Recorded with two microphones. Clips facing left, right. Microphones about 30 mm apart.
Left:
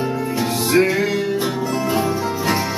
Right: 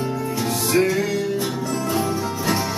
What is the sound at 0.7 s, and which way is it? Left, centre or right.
Music, left.